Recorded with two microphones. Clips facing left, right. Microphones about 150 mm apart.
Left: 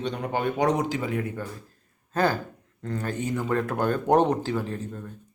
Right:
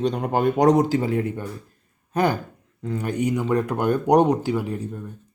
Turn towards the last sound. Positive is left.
turn(degrees=-15)  # may be behind; listen again after turning